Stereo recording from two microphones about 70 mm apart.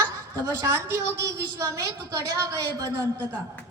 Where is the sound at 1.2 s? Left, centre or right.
Right.